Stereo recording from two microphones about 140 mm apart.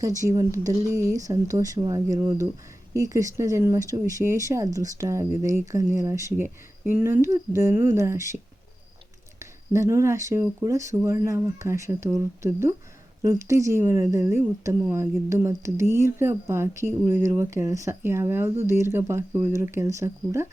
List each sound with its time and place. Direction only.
0.2 s speech: 20° right (ahead or behind)
9.4 s speech: 20° right (ahead or behind)